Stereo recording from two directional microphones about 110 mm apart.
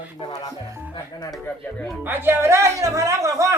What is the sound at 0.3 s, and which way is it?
Speech, 35° left (ahead or behind).